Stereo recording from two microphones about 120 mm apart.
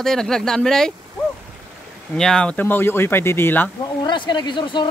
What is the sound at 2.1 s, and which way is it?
Speech, 5° left (ahead or behind).